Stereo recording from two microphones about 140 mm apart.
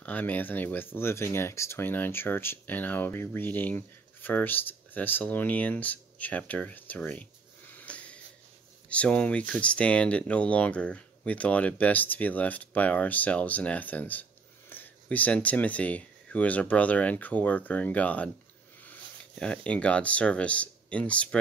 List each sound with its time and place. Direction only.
0.0 s speech: 10° left (ahead or behind)
7.7 s wheeze: 10° left (ahead or behind)
8.8 s speech: 10° left (ahead or behind)